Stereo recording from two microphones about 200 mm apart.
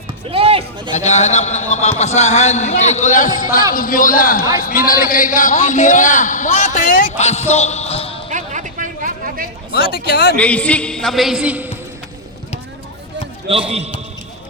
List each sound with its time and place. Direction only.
0.3 s a sound: 25° right (ahead or behind)
0.9 s a man's voice: 35° left (ahead or behind)
8.3 s a sound: 40° right (ahead or behind)
10.1 s a man's voice: 50° left (ahead or behind)
10.3 s a man's voice: 5° left (ahead or behind)
13.5 s a man's voice: 30° right (ahead or behind)